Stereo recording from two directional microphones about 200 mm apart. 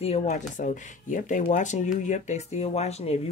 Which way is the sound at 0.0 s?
35° left (ahead or behind).